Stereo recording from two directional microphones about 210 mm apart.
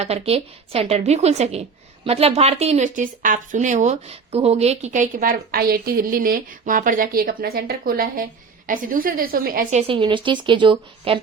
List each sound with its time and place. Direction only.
0.0 s a woman's voice: 30° right (ahead or behind)
9.8 s a woman's voice: 25° right (ahead or behind)